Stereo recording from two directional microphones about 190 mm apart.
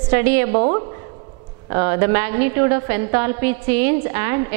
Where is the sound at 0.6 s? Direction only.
35° right (ahead or behind).